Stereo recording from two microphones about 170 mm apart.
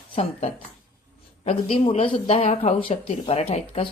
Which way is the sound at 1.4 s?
35° left (ahead or behind).